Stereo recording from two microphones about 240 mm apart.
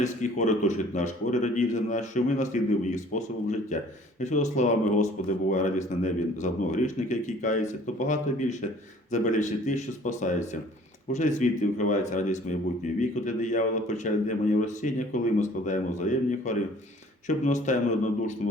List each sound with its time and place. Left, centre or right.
0.0 s speech: left